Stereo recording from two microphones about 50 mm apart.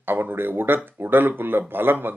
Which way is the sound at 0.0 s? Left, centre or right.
Right.